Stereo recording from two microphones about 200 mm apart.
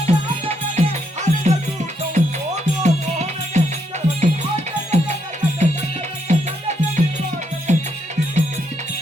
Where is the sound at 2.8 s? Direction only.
35° right (ahead or behind).